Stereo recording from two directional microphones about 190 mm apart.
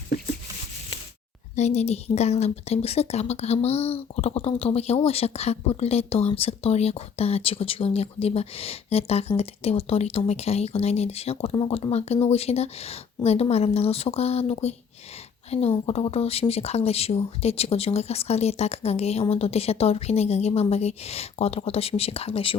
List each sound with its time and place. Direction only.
1.5 s a woman's voice: 35° left (ahead or behind)